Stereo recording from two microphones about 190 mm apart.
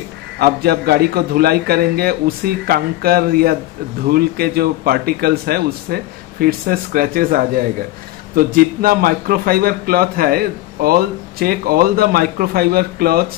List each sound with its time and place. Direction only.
0.4 s a man's voice: 55° right (ahead or behind)
8.4 s a man's voice: 50° right (ahead or behind)